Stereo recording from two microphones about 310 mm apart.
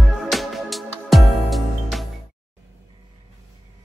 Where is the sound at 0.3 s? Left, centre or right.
Centre.